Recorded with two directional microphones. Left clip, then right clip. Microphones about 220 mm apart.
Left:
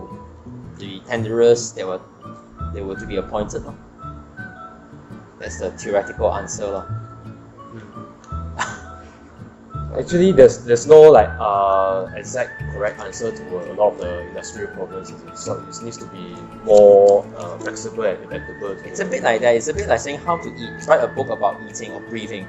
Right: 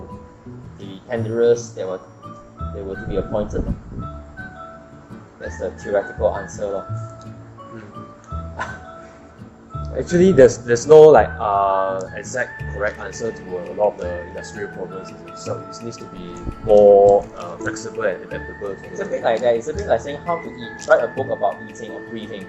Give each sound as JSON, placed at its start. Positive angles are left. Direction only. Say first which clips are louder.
{"t": 0.8, "sound": "speech", "louder": "left 1 dB", "side_deg": 35}
{"t": 3.1, "sound": "speech", "louder": "right 2 dB", "side_deg": 30}
{"t": 5.8, "sound": "speech", "louder": "even", "side_deg": 35}
{"t": 10.0, "sound": "speech", "louder": "left 1 dB", "side_deg": -10}
{"t": 18.9, "sound": "speech", "louder": "left 1 dB", "side_deg": 35}